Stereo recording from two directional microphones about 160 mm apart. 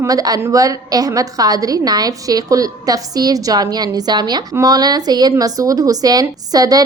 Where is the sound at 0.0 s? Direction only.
20° right (ahead or behind).